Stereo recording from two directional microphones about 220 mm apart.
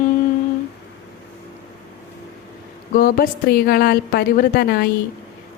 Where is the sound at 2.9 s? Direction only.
40° left (ahead or behind).